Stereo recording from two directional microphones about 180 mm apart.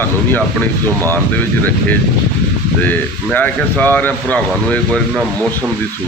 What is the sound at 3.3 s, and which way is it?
Speech, 10° left (ahead or behind).